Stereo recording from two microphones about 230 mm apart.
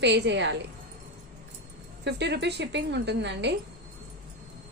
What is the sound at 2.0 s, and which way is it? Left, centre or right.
A woman's voice, right.